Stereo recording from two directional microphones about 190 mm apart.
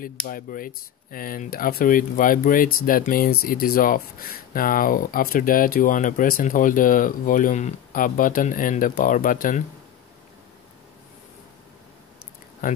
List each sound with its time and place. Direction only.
0.0 s speech: 50° left (ahead or behind)
12.6 s speech: 50° left (ahead or behind)